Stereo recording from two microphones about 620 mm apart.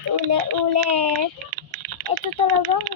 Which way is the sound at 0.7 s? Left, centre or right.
Right.